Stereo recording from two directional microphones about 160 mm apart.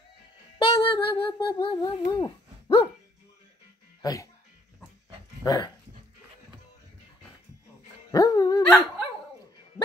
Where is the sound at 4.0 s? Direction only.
20° left (ahead or behind).